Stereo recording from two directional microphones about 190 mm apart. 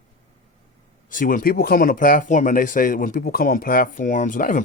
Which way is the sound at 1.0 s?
45° left (ahead or behind).